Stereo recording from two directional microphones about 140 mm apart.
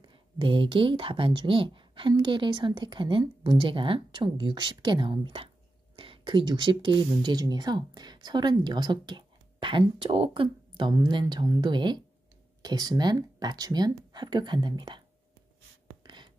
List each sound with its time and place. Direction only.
0.0 s speech: 35° right (ahead or behind)
16.0 s writing: 30° right (ahead or behind)